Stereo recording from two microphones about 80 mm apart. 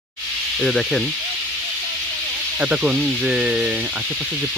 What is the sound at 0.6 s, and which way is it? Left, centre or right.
Speech, centre.